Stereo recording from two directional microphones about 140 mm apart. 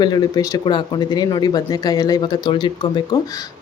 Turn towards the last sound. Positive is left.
turn(degrees=35)  # may be behind; listen again after turning